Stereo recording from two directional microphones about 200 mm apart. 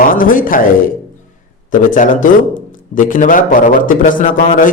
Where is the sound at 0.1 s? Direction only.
45° left (ahead or behind).